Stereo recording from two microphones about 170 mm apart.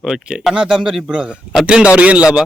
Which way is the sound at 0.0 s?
5° right (ahead or behind).